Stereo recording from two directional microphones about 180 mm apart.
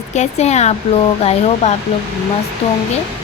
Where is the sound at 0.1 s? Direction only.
40° left (ahead or behind).